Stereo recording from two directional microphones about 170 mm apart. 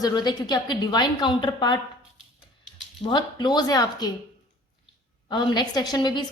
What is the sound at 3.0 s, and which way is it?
A woman's voice, 25° left (ahead or behind).